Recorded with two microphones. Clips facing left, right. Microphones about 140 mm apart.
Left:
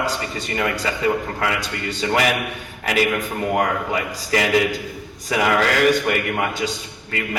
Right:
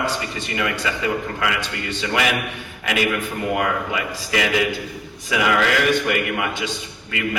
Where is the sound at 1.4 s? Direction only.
35° left (ahead or behind).